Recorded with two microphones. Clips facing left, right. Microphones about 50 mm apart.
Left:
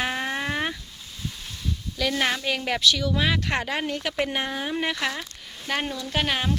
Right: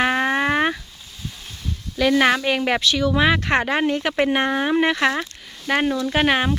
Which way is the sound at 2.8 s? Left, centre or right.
Right.